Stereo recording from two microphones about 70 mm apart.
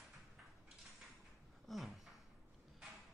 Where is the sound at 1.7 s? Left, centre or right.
Centre.